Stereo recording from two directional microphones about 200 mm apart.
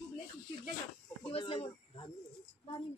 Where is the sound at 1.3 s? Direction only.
25° left (ahead or behind).